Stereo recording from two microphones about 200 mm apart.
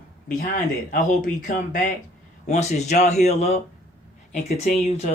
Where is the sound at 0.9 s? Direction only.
40° left (ahead or behind).